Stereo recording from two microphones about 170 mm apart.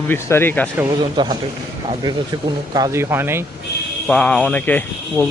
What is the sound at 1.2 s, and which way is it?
A man's voice, 25° right (ahead or behind).